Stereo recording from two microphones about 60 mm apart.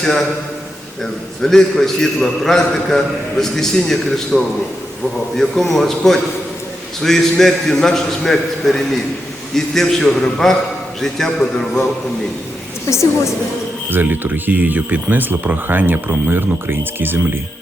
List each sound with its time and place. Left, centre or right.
0.0 s a man's voice: centre
1.4 s a man's voice: centre
13.9 s speech: right